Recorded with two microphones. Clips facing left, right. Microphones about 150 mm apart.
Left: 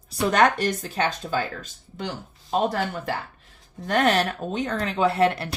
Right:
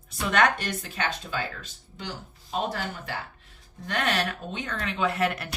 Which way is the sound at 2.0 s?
55° left (ahead or behind).